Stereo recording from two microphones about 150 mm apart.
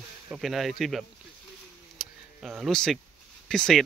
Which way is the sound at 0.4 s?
Centre (ahead or behind).